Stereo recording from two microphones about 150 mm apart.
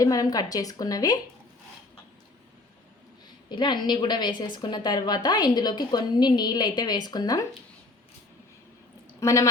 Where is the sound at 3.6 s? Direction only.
30° left (ahead or behind).